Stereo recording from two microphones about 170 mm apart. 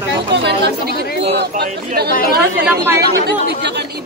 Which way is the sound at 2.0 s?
70° right (ahead or behind).